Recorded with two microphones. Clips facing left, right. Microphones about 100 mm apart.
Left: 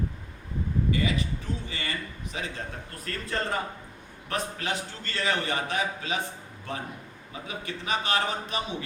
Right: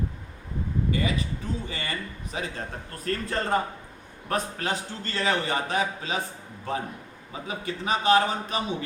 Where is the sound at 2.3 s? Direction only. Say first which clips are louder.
Right 2 dB; 30° right (ahead or behind).